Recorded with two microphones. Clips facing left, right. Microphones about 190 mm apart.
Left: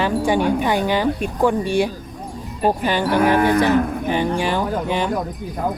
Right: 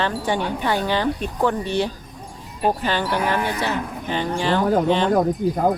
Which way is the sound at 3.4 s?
55° left (ahead or behind).